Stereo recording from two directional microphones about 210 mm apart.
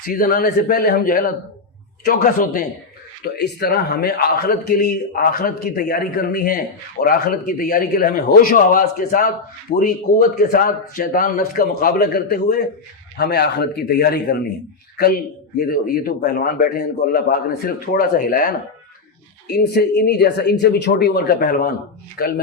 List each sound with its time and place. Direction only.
0.0 s a man's voice: 45° left (ahead or behind)